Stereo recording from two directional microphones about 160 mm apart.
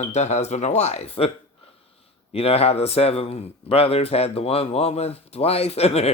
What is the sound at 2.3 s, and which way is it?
A man's voice, 40° left (ahead or behind).